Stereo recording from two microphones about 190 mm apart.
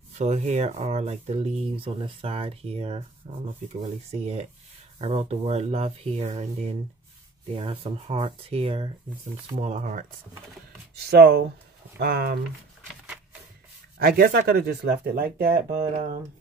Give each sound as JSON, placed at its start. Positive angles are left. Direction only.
{"t": 0.2, "sound": "speech", "side_deg": -35}
{"t": 11.1, "sound": "speech", "side_deg": -55}
{"t": 13.9, "sound": "speech", "side_deg": -50}